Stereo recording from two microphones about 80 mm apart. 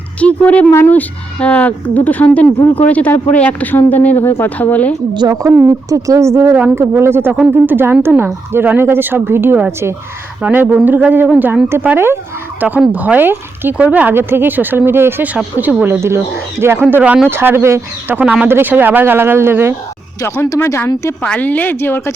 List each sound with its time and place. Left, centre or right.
0.2 s a woman's voice: centre
5.3 s speech: right
18.1 s speech: centre
20.2 s speech: left
21.2 s a woman's voice: centre